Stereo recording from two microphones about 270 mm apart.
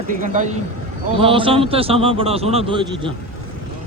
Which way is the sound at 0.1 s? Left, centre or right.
Right.